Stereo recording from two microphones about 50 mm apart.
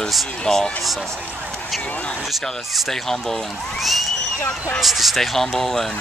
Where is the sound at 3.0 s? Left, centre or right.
Centre.